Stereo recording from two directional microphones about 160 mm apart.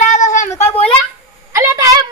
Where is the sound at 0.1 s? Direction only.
50° left (ahead or behind).